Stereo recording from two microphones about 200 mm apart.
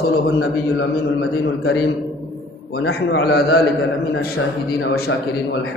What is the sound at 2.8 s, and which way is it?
A man's voice, 55° left (ahead or behind).